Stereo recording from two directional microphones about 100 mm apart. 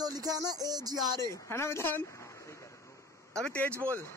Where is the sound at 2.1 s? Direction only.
30° left (ahead or behind).